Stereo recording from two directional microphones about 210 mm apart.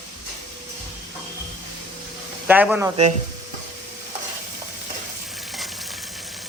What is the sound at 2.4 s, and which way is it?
Speech, 10° right (ahead or behind).